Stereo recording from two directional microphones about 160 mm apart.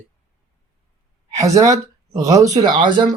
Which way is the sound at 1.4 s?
20° right (ahead or behind).